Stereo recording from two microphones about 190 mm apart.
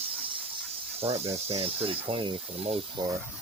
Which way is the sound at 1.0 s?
30° right (ahead or behind).